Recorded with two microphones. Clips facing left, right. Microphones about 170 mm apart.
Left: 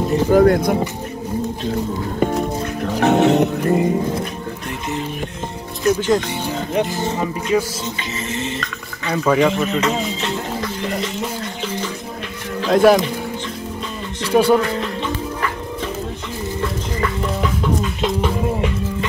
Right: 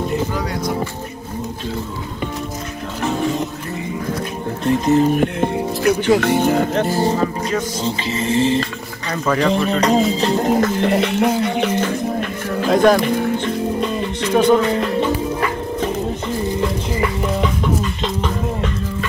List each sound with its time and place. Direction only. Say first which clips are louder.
0.3 s speech: left 10 dB; 50° left (ahead or behind)
3.0 s music: left 7 dB; 70° left (ahead or behind)
4.6 s music: right 13 dB; 40° right (ahead or behind)
5.2 s speech: right 10 dB; 60° right (ahead or behind)
6.9 s music: right 4 dB; 35° right (ahead or behind)
9.1 s speech: left 3 dB; 10° left (ahead or behind)
9.5 s music: right 3 dB; 35° right (ahead or behind)
10.8 s music: right 7 dB; 65° right (ahead or behind)
12.6 s speech: left 1 dB; centre (ahead or behind)
14.3 s speech: even; 10° left (ahead or behind)
18.0 s a sound: left 2 dB; 10° left (ahead or behind)